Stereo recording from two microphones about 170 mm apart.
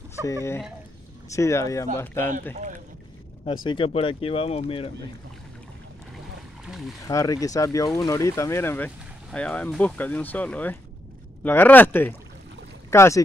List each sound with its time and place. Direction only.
0.3 s speech: 15° left (ahead or behind)
3.6 s speech: 30° left (ahead or behind)
6.6 s boat: 5° right (ahead or behind)
7.1 s speech: 20° left (ahead or behind)